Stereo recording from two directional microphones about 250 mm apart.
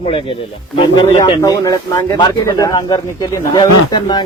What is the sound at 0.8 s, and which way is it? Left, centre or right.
Speech, centre.